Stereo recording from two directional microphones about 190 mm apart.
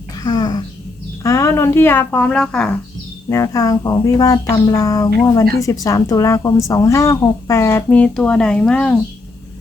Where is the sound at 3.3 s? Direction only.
15° left (ahead or behind).